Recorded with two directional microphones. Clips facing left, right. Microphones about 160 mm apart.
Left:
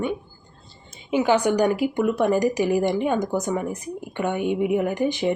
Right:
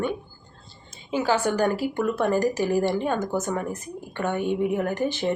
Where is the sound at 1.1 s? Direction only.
15° left (ahead or behind).